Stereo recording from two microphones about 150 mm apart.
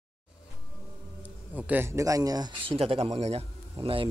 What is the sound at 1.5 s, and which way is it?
Speech, 10° right (ahead or behind).